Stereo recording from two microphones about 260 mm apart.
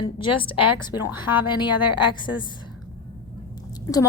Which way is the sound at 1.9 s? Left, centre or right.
Centre.